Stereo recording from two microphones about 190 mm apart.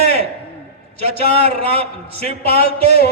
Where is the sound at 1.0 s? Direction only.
30° right (ahead or behind).